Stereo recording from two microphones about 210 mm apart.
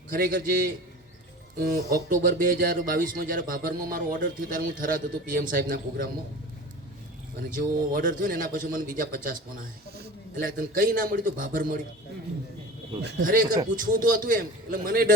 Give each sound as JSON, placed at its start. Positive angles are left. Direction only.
{"t": 0.1, "sound": "a man's voice", "side_deg": -45}
{"t": 7.5, "sound": "speech", "side_deg": -40}
{"t": 13.0, "sound": "a man's voice", "side_deg": -55}